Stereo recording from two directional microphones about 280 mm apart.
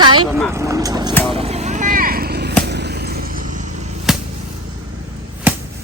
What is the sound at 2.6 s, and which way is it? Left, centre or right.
Arrow, right.